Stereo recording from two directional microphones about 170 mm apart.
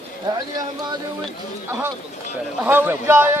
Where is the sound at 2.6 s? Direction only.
10° right (ahead or behind).